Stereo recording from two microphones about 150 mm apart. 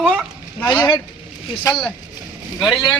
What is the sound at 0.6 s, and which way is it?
Speech, 30° left (ahead or behind).